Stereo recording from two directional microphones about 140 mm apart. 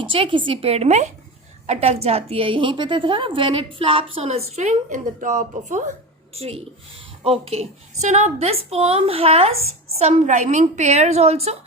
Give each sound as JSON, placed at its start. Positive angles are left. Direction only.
{"t": 0.0, "sound": "a woman's voice", "side_deg": -40}
{"t": 7.3, "sound": "a woman's voice", "side_deg": -45}